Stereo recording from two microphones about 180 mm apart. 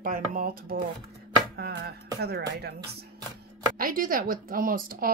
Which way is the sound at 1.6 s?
60° right (ahead or behind).